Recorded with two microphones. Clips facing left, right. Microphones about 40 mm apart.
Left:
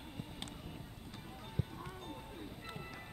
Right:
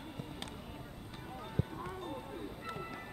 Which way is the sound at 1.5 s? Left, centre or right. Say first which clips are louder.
Right 4 dB; centre.